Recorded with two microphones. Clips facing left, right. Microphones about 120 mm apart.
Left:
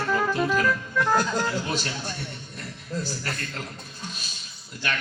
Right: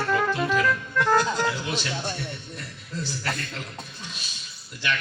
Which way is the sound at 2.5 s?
45° left (ahead or behind).